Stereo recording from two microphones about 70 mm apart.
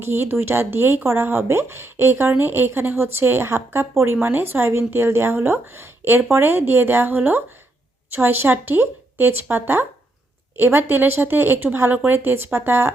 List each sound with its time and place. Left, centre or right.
0.0 s speech: right